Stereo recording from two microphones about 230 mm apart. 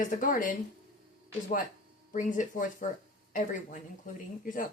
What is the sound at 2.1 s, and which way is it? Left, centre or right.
Speech, left.